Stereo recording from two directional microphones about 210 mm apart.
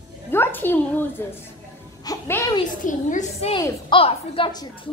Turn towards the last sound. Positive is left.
turn(degrees=20)  # may be behind; listen again after turning